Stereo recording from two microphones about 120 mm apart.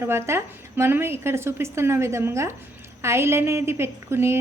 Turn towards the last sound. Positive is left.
turn(degrees=-20)  # may be behind; listen again after turning